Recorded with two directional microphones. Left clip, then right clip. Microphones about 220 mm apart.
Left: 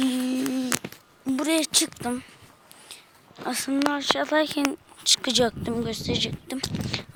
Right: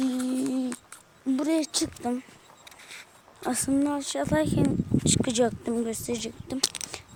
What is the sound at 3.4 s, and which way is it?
Speech, 20° right (ahead or behind).